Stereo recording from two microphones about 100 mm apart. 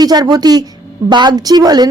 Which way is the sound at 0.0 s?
40° right (ahead or behind).